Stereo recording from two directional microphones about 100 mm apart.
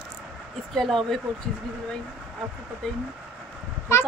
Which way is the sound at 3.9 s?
25° left (ahead or behind).